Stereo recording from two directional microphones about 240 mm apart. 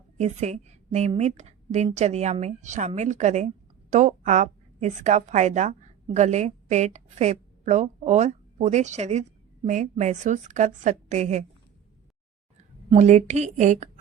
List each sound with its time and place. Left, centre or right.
0.2 s a woman's voice: right
12.9 s a woman's voice: right